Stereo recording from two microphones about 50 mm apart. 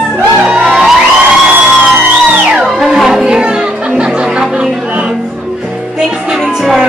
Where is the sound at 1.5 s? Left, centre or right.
Right.